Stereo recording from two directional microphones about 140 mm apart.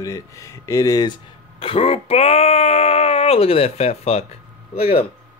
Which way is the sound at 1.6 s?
40° left (ahead or behind).